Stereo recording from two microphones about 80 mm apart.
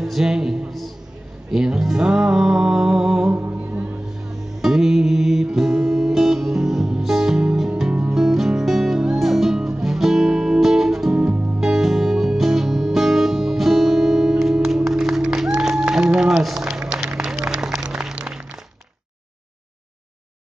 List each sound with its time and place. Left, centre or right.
0.0 s a sound: centre
1.5 s music: centre
3.3 s music: right
4.6 s music: centre